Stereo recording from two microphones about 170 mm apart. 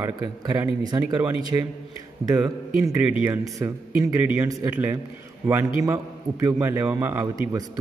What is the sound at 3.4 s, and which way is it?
A man's voice, 20° right (ahead or behind).